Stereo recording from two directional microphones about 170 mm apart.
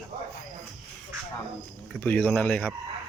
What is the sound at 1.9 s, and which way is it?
Speech, 10° left (ahead or behind).